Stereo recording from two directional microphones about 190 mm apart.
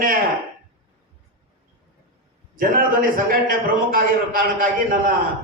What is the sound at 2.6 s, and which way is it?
A man's voice, 45° right (ahead or behind).